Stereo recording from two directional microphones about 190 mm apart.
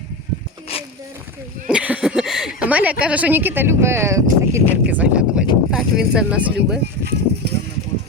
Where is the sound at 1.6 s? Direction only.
5° right (ahead or behind).